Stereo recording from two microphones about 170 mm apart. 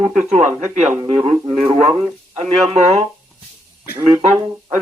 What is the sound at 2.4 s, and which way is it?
Speech, 40° right (ahead or behind).